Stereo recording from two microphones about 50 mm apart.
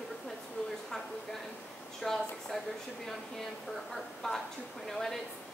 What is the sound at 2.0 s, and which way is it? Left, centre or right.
Speech, centre.